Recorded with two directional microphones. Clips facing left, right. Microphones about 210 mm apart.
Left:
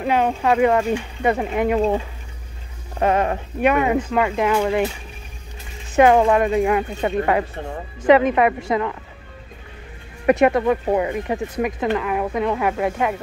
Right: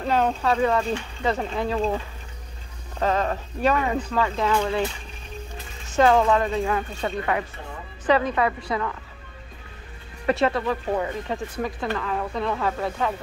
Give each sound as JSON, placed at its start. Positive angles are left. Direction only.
{"t": 0.0, "sound": "speech", "side_deg": 10}
{"t": 3.0, "sound": "speech", "side_deg": 15}
{"t": 5.9, "sound": "speech", "side_deg": 15}
{"t": 10.2, "sound": "speech", "side_deg": 15}